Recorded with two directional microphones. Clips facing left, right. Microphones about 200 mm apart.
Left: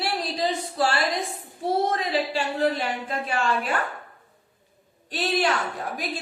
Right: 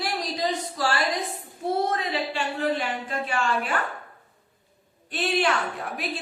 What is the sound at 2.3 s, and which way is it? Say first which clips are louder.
A woman's voice: left 2 dB; 35° left (ahead or behind).